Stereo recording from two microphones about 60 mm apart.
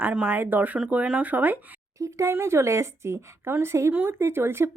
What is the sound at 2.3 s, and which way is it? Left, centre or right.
A woman's voice, right.